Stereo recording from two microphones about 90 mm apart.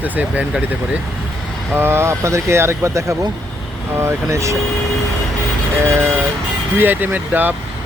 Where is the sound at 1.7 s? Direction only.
25° right (ahead or behind).